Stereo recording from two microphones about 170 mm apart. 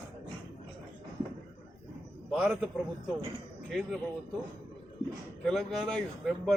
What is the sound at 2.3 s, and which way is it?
Speech, centre (ahead or behind).